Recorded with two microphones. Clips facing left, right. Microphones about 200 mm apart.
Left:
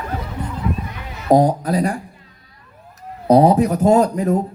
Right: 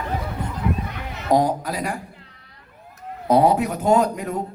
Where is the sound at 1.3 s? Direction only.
40° left (ahead or behind).